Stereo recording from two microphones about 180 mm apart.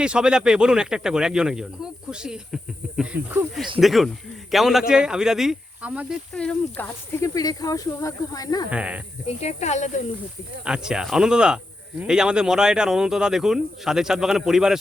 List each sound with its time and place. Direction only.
0.0 s speech: 5° right (ahead or behind)
6.3 s speech: 5° left (ahead or behind)
8.7 s speech: 5° right (ahead or behind)
9.2 s speech: 35° left (ahead or behind)
10.7 s speech: 5° right (ahead or behind)